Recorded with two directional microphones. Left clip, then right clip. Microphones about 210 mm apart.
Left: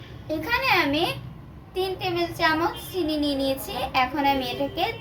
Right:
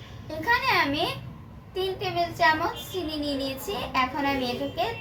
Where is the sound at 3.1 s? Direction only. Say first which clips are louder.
Left 6 dB; 45° left (ahead or behind).